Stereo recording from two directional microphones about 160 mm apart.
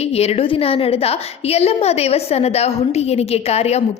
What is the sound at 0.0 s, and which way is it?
A woman's voice, 40° left (ahead or behind).